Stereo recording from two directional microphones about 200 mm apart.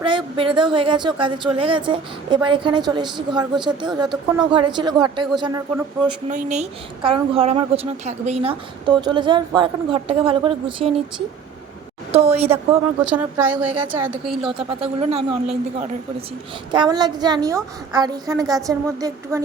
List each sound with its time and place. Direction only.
0.0 s a woman's voice: 25° right (ahead or behind)
6.2 s a woman's voice: 35° right (ahead or behind)
12.1 s speech: 30° right (ahead or behind)
13.1 s a woman's voice: 10° right (ahead or behind)
14.7 s speech: 30° right (ahead or behind)
16.7 s a woman's voice: 20° right (ahead or behind)